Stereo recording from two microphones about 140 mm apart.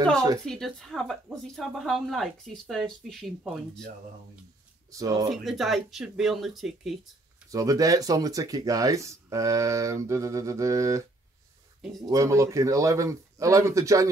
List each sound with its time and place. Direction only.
0.5 s speech: centre (ahead or behind)
4.9 s speech: 25° right (ahead or behind)
5.3 s speech: centre (ahead or behind)
7.5 s speech: 25° right (ahead or behind)